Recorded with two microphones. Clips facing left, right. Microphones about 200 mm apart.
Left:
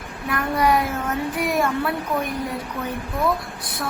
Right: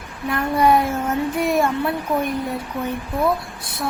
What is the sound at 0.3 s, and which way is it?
Speech, 25° right (ahead or behind).